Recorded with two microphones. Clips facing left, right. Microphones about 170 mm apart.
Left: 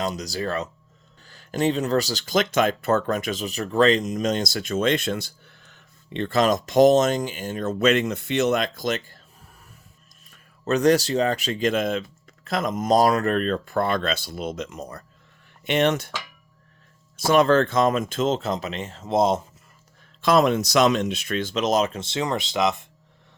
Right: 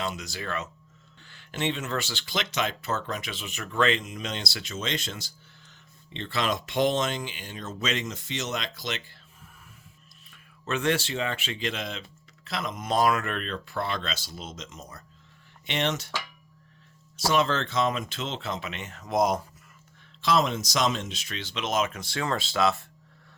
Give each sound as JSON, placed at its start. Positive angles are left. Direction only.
{"t": 0.0, "sound": "speech", "side_deg": 40}
{"t": 10.3, "sound": "speech", "side_deg": 40}
{"t": 17.2, "sound": "speech", "side_deg": 55}
{"t": 20.2, "sound": "speech", "side_deg": 55}